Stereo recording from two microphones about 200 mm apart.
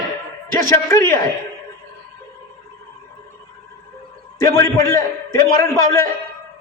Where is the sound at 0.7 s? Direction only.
15° left (ahead or behind).